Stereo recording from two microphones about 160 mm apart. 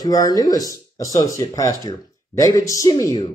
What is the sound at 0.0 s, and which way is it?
Speech, 20° left (ahead or behind).